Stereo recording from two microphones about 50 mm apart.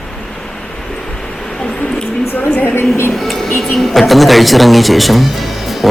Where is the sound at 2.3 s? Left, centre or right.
Left.